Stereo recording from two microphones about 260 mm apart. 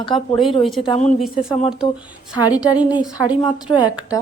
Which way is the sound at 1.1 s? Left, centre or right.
Centre.